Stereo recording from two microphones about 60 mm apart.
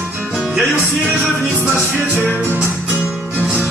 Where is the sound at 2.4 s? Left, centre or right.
Right.